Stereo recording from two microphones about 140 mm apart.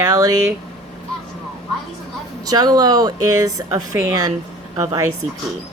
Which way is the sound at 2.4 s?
30° right (ahead or behind).